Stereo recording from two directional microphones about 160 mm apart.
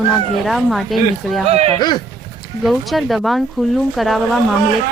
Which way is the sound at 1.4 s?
40° right (ahead or behind).